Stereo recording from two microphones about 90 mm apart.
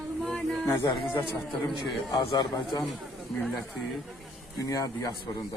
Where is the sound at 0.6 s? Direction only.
30° left (ahead or behind).